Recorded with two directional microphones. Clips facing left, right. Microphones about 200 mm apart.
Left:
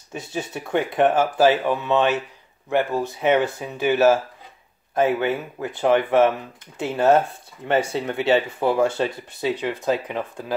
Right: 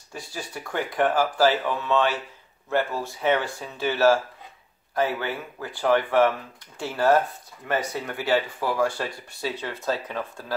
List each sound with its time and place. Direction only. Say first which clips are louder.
0.1 s speech: left 6 dB; 25° left (ahead or behind)